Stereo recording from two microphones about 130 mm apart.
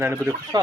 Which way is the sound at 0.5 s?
30° right (ahead or behind).